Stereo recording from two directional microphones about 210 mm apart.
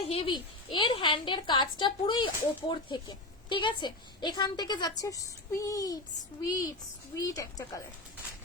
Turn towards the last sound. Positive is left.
turn(degrees=15)  # may be behind; listen again after turning